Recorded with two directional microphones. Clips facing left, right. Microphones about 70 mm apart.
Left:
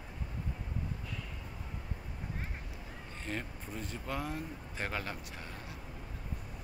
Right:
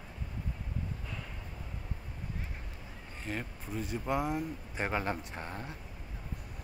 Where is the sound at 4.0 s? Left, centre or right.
Centre.